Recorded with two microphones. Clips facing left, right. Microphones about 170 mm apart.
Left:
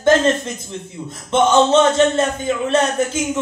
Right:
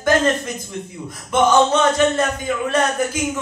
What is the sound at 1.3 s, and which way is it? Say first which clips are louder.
Speech: left 2 dB; 25° left (ahead or behind).